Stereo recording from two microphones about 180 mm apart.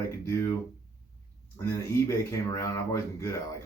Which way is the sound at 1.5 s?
15° left (ahead or behind).